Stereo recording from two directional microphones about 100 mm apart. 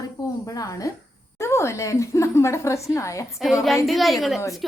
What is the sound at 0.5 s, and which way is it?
A woman's voice, 35° left (ahead or behind).